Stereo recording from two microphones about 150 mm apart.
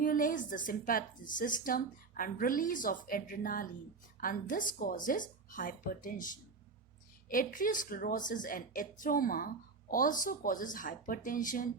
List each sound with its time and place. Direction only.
0.0 s a woman's voice: 65° left (ahead or behind)